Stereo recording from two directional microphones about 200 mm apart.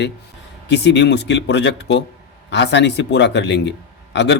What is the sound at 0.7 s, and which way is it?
A man's voice, 60° left (ahead or behind).